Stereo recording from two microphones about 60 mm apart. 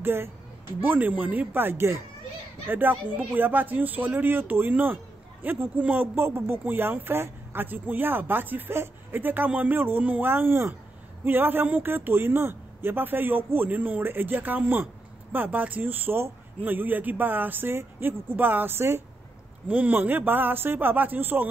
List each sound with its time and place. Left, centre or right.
0.0 s speech: right
6.1 s speech: right
19.7 s speech: right